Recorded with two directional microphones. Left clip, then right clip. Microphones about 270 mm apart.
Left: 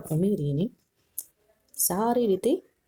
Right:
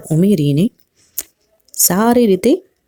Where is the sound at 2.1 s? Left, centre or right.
Right.